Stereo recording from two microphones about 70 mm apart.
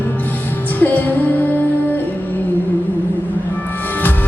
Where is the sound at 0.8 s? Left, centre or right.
Left.